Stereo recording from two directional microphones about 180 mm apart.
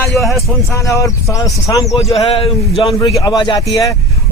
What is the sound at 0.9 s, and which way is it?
Speech, 20° left (ahead or behind).